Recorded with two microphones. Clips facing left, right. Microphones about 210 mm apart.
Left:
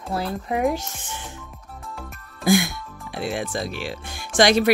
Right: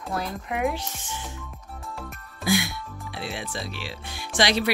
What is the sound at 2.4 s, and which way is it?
Speech, 45° left (ahead or behind).